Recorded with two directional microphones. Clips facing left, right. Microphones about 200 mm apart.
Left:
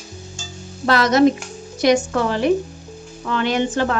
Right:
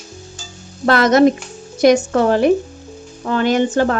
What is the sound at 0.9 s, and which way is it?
A woman's voice, 55° right (ahead or behind).